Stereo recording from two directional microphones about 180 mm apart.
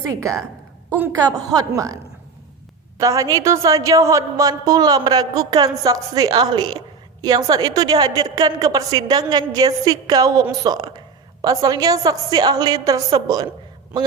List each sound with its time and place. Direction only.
0.1 s a woman's voice: 15° right (ahead or behind)
3.0 s a woman's voice: 20° right (ahead or behind)